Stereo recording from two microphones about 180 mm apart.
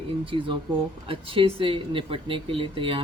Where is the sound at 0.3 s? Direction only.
30° right (ahead or behind).